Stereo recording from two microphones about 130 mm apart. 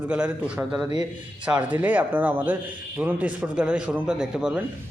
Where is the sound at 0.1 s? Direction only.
10° right (ahead or behind).